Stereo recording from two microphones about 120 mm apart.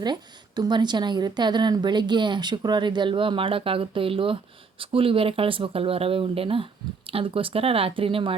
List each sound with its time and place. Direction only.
0.0 s a woman's voice: 35° right (ahead or behind)